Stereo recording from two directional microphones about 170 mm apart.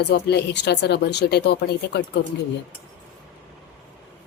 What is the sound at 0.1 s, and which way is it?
Speech, 75° left (ahead or behind).